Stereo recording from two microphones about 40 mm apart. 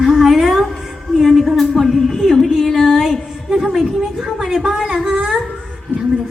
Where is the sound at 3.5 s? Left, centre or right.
Centre.